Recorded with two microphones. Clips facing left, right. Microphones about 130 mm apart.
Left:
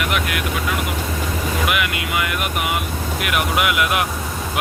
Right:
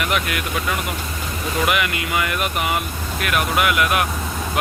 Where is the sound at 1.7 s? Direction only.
5° left (ahead or behind).